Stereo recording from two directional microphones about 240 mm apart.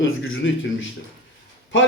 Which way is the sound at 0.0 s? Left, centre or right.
Left.